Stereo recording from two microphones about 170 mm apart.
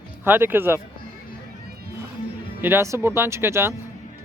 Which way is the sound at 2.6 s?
15° right (ahead or behind).